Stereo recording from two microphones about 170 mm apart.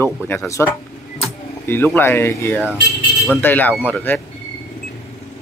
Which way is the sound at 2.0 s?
15° left (ahead or behind).